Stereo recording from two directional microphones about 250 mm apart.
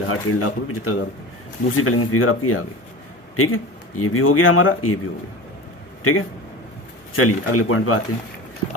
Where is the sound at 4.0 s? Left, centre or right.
Left.